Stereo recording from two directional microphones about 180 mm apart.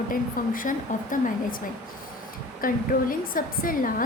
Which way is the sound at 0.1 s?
50° left (ahead or behind).